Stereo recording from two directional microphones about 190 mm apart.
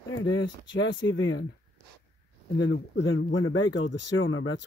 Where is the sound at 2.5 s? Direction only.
70° left (ahead or behind).